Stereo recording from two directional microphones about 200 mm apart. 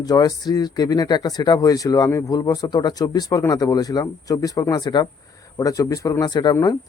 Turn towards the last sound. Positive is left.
turn(degrees=20)  # may be behind; listen again after turning